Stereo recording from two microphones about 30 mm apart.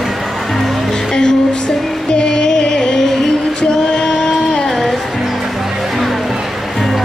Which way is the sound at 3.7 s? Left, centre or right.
Left.